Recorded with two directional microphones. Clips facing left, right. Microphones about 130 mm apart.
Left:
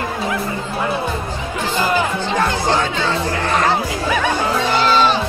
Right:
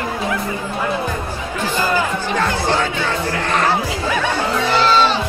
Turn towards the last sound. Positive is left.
turn(degrees=15)  # may be behind; listen again after turning